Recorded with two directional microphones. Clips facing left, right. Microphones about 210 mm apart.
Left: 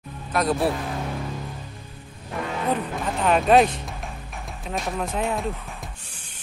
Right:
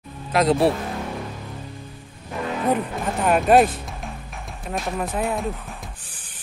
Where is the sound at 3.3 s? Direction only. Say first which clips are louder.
Right 1 dB; 5° right (ahead or behind).